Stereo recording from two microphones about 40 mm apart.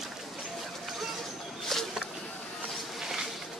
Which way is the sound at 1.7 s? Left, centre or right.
Centre.